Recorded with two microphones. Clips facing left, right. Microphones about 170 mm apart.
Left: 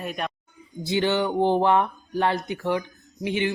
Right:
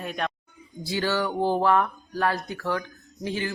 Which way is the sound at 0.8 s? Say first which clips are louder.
Left 3 dB; 20° left (ahead or behind).